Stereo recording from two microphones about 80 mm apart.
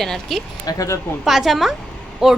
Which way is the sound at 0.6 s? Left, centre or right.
Left.